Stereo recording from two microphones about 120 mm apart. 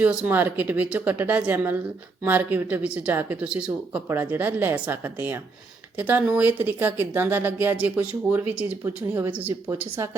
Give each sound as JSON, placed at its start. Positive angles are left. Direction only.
{"t": 0.0, "sound": "speech", "side_deg": -15}